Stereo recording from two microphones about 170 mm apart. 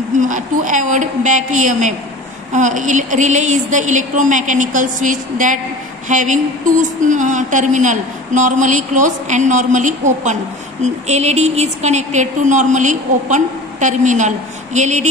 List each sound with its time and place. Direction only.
0.2 s a woman's voice: 50° right (ahead or behind)